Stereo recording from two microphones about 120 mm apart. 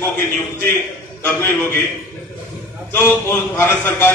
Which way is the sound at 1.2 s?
20° left (ahead or behind).